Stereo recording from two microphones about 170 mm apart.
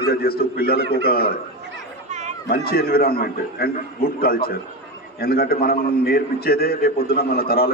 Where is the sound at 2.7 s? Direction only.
65° left (ahead or behind).